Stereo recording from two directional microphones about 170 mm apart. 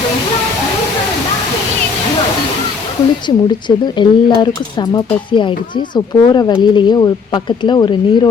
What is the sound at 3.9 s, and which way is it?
Speech, 25° left (ahead or behind).